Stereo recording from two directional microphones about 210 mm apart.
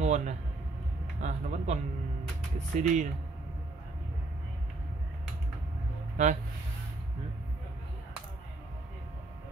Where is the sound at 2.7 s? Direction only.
35° right (ahead or behind).